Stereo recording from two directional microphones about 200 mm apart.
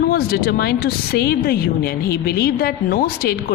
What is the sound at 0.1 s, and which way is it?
Speech, 50° left (ahead or behind).